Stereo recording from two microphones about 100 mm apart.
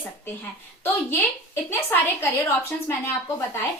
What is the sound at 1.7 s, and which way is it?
Speech, 25° left (ahead or behind).